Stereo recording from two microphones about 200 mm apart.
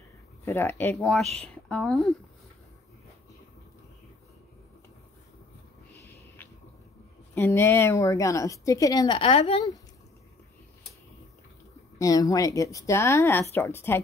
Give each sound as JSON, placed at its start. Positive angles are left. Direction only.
{"t": 0.5, "sound": "a woman's voice", "side_deg": 10}
{"t": 5.9, "sound": "a sound", "side_deg": 10}
{"t": 7.3, "sound": "a woman's voice", "side_deg": 10}
{"t": 12.0, "sound": "a woman's voice", "side_deg": 20}